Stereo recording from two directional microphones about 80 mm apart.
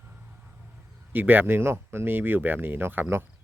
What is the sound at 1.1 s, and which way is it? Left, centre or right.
Speech, right.